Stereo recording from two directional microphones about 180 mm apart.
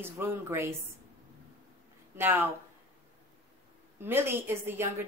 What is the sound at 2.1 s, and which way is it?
Speech, 10° right (ahead or behind).